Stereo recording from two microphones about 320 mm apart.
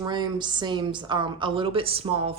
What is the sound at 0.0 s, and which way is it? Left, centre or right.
A woman's voice, centre.